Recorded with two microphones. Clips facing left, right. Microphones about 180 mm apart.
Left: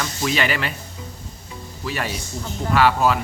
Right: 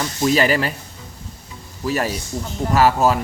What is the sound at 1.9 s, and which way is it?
Speech, 40° right (ahead or behind).